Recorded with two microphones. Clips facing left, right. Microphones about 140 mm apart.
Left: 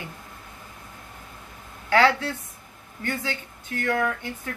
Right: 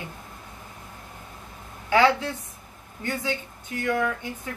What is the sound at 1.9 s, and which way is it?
A woman's voice, 15° right (ahead or behind).